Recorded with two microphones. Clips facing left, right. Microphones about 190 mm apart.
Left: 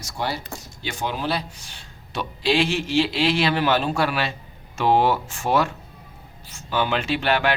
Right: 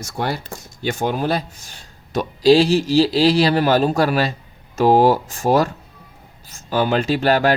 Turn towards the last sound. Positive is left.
turn(degrees=-40)  # may be behind; listen again after turning